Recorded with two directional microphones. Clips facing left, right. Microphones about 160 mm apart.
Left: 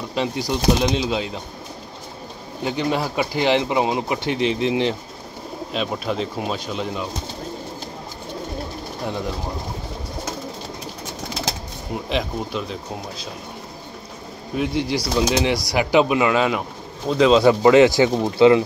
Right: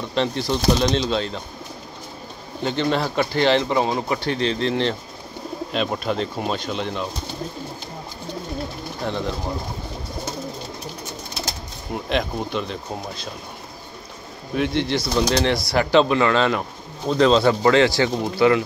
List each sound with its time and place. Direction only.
0.1 s speech: 10° left (ahead or behind)
2.6 s speech: 10° left (ahead or behind)
5.7 s speech: centre (ahead or behind)
9.0 s speech: 10° left (ahead or behind)
11.9 s speech: centre (ahead or behind)
14.5 s speech: 5° left (ahead or behind); by 18.6 s 20° left (ahead or behind)